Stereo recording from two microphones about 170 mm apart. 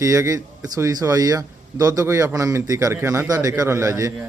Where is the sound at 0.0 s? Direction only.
20° right (ahead or behind).